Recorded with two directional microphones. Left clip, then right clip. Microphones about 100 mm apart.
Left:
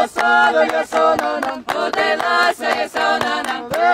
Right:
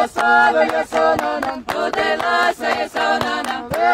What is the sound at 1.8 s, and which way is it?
Choir, 20° left (ahead or behind).